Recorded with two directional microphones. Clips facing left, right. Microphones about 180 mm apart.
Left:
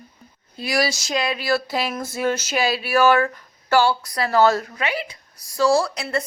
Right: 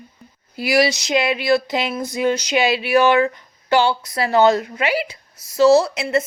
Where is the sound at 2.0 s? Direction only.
15° right (ahead or behind).